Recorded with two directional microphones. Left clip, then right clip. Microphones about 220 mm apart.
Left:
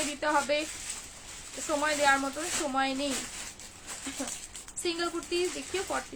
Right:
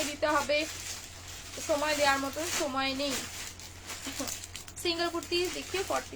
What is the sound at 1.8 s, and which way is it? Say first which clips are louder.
Speech: left 3 dB; 15° left (ahead or behind).